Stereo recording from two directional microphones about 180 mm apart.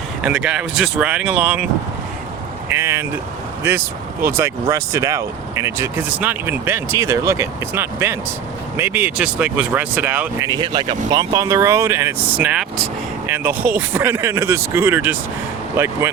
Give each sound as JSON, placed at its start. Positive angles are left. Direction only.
{"t": 0.2, "sound": "speech", "side_deg": -5}
{"t": 2.6, "sound": "speech", "side_deg": -15}